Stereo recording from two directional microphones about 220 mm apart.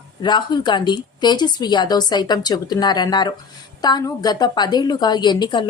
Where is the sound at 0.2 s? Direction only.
20° left (ahead or behind).